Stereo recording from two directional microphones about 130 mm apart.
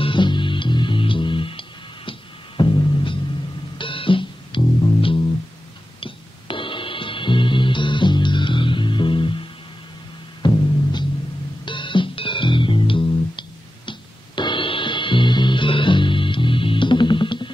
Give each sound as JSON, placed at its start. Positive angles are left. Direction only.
{"t": 0.0, "sound": "music", "side_deg": 40}